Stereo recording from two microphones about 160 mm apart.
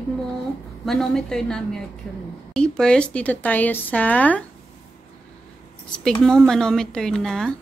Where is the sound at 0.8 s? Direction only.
5° left (ahead or behind).